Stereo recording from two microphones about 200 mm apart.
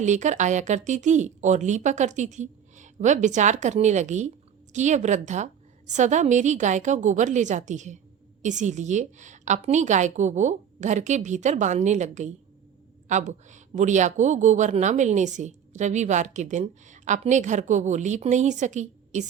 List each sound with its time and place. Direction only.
0.0 s speech: 35° right (ahead or behind)